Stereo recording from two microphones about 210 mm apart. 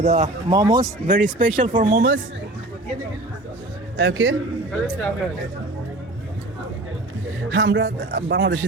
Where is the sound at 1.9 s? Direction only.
55° right (ahead or behind).